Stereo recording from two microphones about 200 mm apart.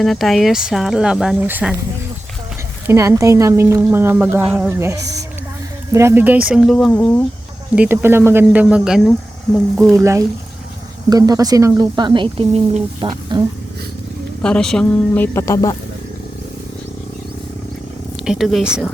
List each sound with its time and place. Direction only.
0.0 s speech: centre (ahead or behind)
2.8 s a woman's voice: 15° right (ahead or behind); by 7.3 s 5° left (ahead or behind)
7.8 s a woman's voice: 10° right (ahead or behind)
10.0 s a woman's voice: 15° right (ahead or behind)
14.4 s speech: 5° left (ahead or behind)
18.3 s speech: centre (ahead or behind)